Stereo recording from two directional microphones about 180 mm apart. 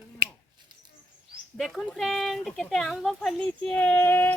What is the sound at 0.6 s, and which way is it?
Mouse, 25° right (ahead or behind).